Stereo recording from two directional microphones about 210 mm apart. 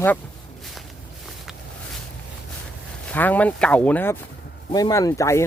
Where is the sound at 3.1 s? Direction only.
5° left (ahead or behind).